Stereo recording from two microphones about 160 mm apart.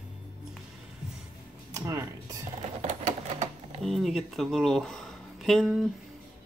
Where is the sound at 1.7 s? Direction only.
20° right (ahead or behind).